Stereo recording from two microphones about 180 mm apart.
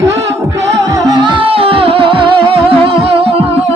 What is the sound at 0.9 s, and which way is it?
Music, 20° right (ahead or behind).